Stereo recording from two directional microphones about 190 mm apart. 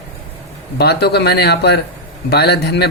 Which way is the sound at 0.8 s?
60° left (ahead or behind).